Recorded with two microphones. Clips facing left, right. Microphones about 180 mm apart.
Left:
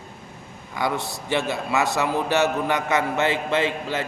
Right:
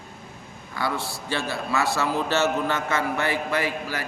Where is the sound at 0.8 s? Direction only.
20° left (ahead or behind).